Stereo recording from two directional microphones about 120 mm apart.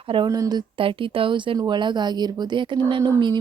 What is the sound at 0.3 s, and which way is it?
Speech, 30° right (ahead or behind).